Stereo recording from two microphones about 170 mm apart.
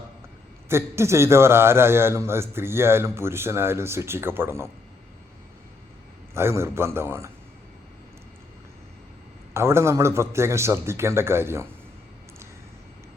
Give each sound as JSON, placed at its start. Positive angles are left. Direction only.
{"t": 0.7, "sound": "a man's voice", "side_deg": -15}
{"t": 6.3, "sound": "a man's voice", "side_deg": -15}
{"t": 9.6, "sound": "a man's voice", "side_deg": -15}